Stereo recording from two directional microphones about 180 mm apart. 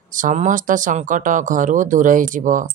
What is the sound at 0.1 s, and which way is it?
Speech, 45° right (ahead or behind).